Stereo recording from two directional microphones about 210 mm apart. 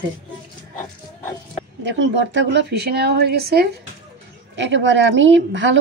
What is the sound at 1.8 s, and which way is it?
A woman's voice, 60° right (ahead or behind).